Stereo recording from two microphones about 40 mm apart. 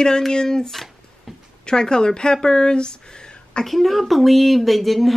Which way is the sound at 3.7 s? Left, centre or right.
Centre.